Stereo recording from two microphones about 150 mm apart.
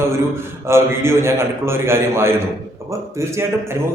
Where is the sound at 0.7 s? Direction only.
15° right (ahead or behind).